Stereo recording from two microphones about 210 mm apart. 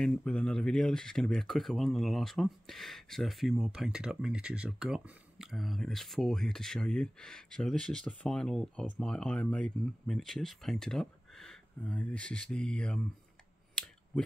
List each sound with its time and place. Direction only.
0.0 s speech: 5° left (ahead or behind)